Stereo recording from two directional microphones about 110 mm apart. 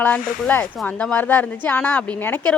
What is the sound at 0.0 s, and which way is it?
Speech, 15° left (ahead or behind).